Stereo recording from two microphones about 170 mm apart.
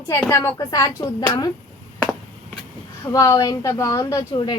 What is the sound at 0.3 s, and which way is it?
A woman's voice, 20° left (ahead or behind).